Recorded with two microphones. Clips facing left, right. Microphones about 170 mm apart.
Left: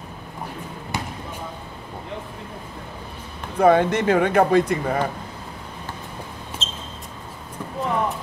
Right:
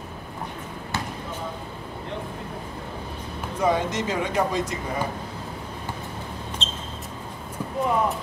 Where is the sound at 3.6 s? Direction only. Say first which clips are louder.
Left 7 dB; 60° left (ahead or behind).